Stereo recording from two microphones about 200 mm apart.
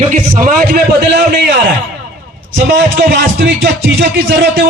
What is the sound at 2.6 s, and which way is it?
Speech, 60° right (ahead or behind).